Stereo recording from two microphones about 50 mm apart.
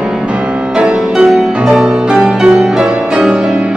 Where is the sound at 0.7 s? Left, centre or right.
Centre.